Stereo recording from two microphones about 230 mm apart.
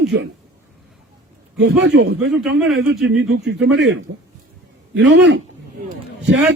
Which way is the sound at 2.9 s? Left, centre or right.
Right.